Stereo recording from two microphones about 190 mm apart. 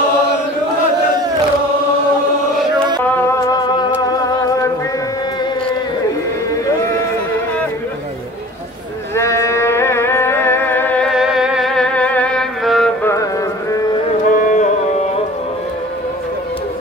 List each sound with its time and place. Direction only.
3.0 s music: 10° left (ahead or behind)
9.1 s music: 15° left (ahead or behind)
13.0 s music: 15° left (ahead or behind)
14.2 s music: 45° left (ahead or behind)